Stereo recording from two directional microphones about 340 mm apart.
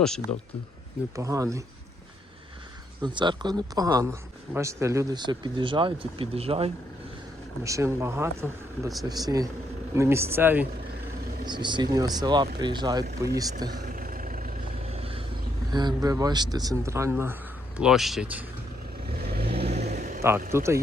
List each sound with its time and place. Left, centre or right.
1.1 s speech: centre
3.0 s speech: centre
13.9 s vehicle: right
15.7 s speech: centre
19.5 s vehicle: centre
20.5 s speech: centre